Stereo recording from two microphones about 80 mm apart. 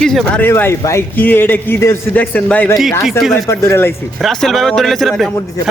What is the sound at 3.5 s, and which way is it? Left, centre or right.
Speech, left.